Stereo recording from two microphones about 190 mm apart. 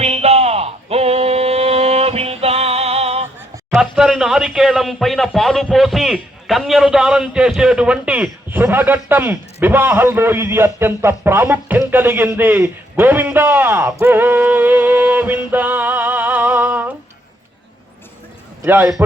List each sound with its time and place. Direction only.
0.0 s a sound: 35° right (ahead or behind)
3.8 s speech: 5° right (ahead or behind)
14.0 s music: 10° right (ahead or behind)
18.6 s speech: 10° right (ahead or behind)